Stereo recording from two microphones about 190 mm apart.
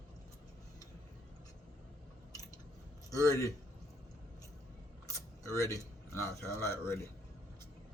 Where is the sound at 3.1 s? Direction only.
15° left (ahead or behind).